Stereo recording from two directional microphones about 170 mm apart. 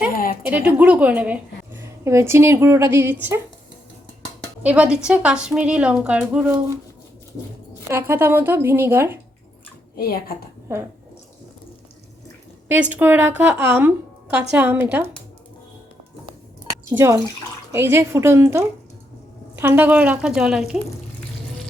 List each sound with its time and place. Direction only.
0.4 s a woman's voice: 10° right (ahead or behind)
4.6 s a woman's voice: 5° right (ahead or behind)
7.9 s a woman's voice: 15° right (ahead or behind)
10.0 s a woman's voice: 65° left (ahead or behind)
10.7 s a woman's voice: 15° right (ahead or behind)
12.6 s a woman's voice: 10° right (ahead or behind)
16.9 s a woman's voice: 15° right (ahead or behind)